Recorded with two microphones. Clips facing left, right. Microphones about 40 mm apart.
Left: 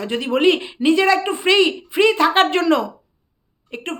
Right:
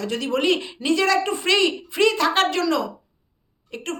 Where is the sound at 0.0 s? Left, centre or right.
Left.